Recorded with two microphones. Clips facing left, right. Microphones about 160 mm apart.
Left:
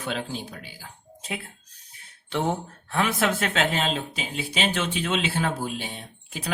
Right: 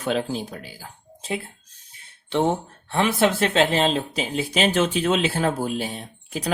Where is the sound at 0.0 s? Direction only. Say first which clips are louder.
Right 6 dB; 40° right (ahead or behind).